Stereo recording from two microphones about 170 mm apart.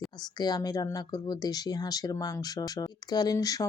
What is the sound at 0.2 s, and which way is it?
Speech, 25° left (ahead or behind).